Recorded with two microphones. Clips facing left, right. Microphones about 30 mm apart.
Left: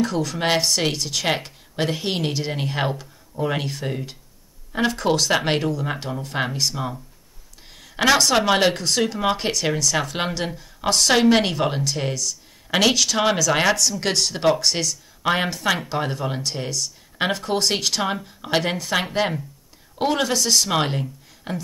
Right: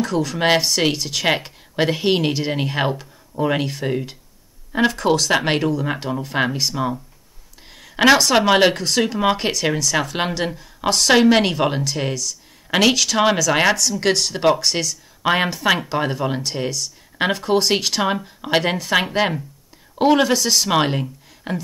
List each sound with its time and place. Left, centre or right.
0.0 s a woman's voice: centre
4.9 s a woman's voice: centre
7.7 s a sound: centre
8.4 s a woman's voice: centre